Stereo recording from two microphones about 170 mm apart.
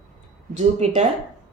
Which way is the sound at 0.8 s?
40° right (ahead or behind).